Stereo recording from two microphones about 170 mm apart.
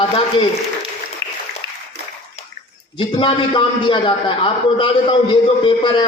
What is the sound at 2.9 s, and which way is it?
A man's voice, 30° left (ahead or behind).